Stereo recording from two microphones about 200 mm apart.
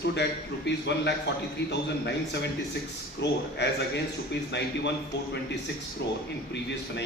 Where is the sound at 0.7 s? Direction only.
60° left (ahead or behind).